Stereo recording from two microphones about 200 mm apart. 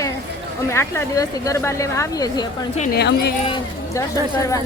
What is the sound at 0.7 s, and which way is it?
Speech, 15° left (ahead or behind).